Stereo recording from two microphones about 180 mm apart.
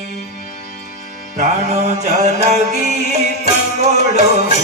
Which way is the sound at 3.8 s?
40° right (ahead or behind).